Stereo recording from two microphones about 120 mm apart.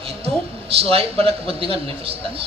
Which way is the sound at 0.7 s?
50° right (ahead or behind).